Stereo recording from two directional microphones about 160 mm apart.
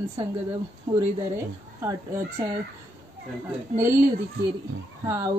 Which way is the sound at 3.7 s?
15° right (ahead or behind).